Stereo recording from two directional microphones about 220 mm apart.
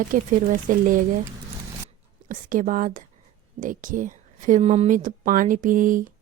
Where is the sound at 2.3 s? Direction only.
35° right (ahead or behind).